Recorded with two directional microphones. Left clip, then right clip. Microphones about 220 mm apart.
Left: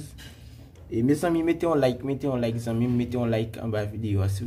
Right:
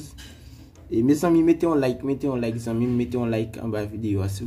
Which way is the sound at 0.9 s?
20° right (ahead or behind).